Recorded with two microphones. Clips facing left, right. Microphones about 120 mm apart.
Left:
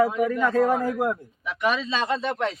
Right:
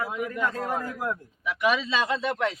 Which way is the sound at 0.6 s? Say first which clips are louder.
Left 9 dB; 90° left.